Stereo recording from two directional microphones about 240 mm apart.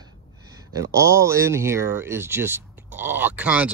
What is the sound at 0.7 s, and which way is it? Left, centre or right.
Speech, centre.